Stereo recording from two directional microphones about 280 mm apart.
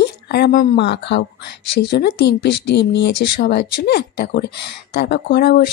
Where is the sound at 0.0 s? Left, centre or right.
Left.